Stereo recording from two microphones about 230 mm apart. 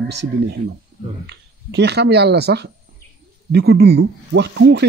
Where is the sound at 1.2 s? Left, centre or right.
Right.